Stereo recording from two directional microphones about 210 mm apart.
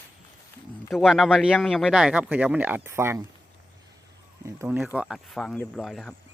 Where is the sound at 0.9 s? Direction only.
Centre (ahead or behind).